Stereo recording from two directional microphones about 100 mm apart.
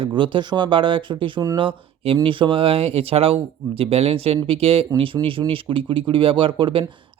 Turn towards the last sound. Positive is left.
turn(degrees=-55)  # may be behind; listen again after turning